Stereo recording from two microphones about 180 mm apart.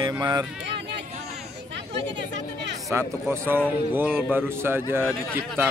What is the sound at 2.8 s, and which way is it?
Speech, 15° right (ahead or behind).